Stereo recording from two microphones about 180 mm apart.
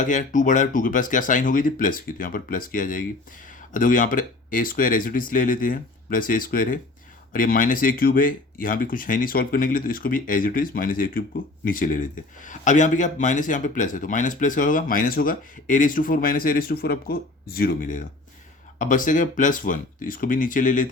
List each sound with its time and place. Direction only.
0.0 s speech: 45° left (ahead or behind)